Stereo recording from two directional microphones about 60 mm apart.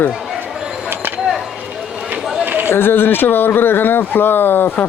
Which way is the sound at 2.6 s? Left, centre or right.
Left.